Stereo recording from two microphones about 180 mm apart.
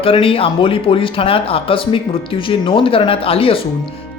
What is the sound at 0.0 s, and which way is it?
Speech, 30° left (ahead or behind).